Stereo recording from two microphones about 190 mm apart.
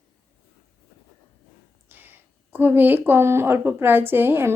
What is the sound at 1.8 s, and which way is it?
A woman's voice, 10° right (ahead or behind).